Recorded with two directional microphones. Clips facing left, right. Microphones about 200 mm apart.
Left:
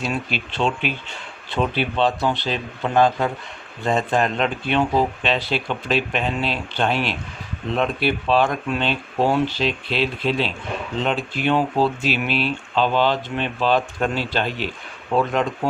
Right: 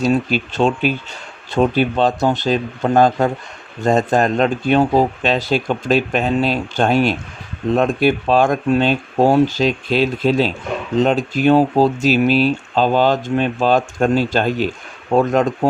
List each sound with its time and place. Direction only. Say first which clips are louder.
0.0 s speech: right 9 dB; 40° right (ahead or behind)